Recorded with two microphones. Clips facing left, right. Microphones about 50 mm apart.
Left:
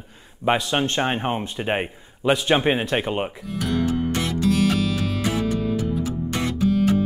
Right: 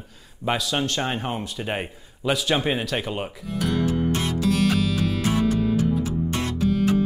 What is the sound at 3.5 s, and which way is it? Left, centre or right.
Music, centre.